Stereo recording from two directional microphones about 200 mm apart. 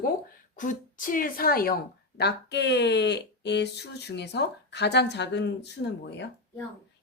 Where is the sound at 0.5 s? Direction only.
40° left (ahead or behind).